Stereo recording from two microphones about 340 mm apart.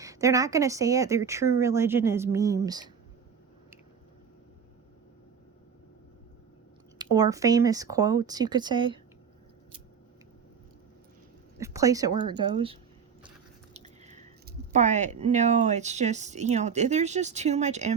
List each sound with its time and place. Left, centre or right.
0.0 s a woman's voice: centre
7.0 s a woman's voice: centre
11.5 s a woman's voice: centre
13.7 s biting: centre
14.7 s speech: right